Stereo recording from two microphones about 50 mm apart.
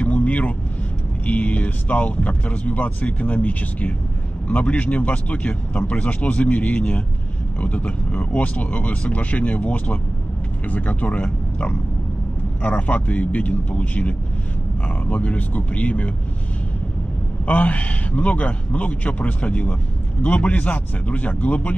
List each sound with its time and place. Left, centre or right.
0.0 s vehicle: left
1.2 s a man's voice: left
12.6 s a man's voice: left
17.5 s a man's voice: left